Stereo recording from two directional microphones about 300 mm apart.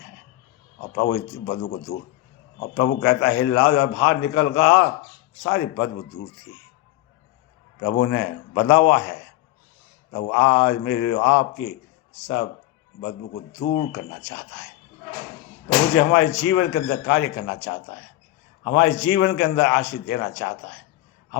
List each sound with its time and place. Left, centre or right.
0.9 s a man's voice: left
2.7 s a man's voice: left
7.8 s a man's voice: left
13.7 s a man's voice: left
16.0 s a man's voice: left